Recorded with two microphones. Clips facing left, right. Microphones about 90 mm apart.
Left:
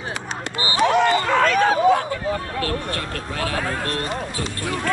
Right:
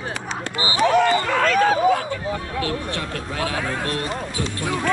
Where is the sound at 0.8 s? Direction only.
20° left (ahead or behind).